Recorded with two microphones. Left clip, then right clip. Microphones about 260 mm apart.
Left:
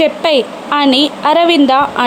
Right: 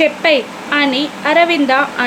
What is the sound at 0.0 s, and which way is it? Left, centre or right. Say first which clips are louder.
A woman's voice: left 1 dB; left.